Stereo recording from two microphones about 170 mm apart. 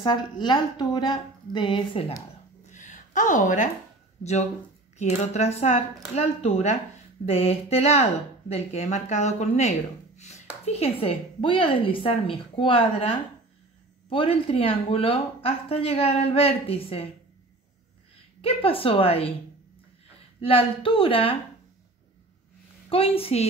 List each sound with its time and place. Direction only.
0.0 s a woman's voice: 25° left (ahead or behind)
2.6 s a sound: 45° left (ahead or behind)
4.2 s speech: 40° left (ahead or behind)
18.4 s speech: 35° left (ahead or behind)
20.3 s speech: 35° left (ahead or behind)
22.8 s speech: 35° left (ahead or behind)